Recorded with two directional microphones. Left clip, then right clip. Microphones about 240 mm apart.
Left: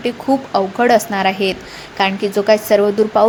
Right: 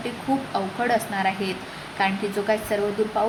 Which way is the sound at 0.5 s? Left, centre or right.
Left.